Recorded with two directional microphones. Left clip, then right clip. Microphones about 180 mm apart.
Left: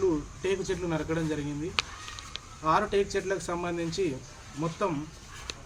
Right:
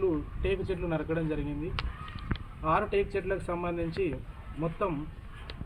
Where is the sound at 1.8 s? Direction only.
40° left (ahead or behind).